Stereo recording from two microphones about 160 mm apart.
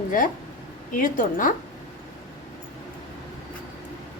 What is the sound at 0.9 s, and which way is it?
Speech, 55° left (ahead or behind).